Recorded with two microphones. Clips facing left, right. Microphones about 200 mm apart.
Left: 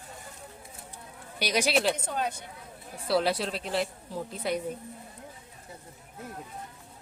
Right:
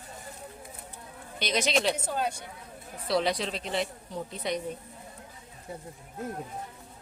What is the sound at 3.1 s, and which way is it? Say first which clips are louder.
Speech: left 1 dB; 5° left (ahead or behind).